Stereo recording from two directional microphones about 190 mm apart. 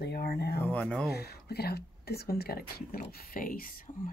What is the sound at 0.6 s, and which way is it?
Speech, 5° left (ahead or behind).